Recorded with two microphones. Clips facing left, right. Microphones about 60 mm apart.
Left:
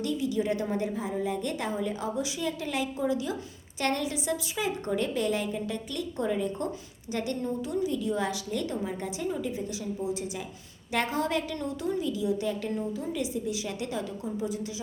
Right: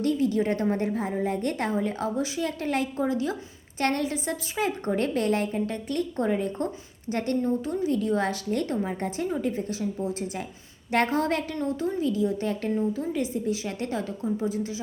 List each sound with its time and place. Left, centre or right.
0.0 s a woman's voice: right